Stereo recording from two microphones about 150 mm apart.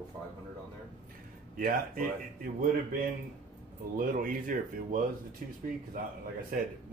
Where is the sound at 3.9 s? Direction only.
65° right (ahead or behind).